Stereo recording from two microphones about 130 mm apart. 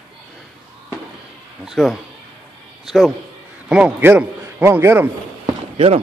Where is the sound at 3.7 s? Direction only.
5° right (ahead or behind).